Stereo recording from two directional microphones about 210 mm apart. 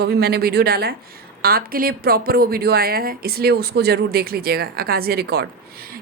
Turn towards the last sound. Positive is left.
turn(degrees=-45)  # may be behind; listen again after turning